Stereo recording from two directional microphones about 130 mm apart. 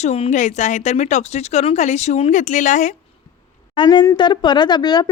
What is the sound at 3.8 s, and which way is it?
Speech, 35° left (ahead or behind).